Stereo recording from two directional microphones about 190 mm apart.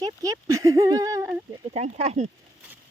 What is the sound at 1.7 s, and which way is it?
Speech, 35° right (ahead or behind).